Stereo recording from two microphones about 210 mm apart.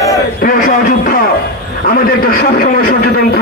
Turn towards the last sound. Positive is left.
turn(degrees=45)  # may be behind; listen again after turning